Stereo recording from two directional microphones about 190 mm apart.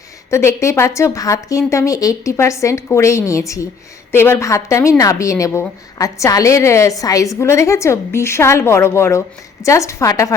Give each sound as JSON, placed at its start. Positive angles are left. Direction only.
{"t": 0.3, "sound": "a woman's voice", "side_deg": 15}